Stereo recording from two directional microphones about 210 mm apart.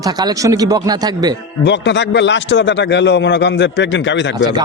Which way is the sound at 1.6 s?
55° left (ahead or behind).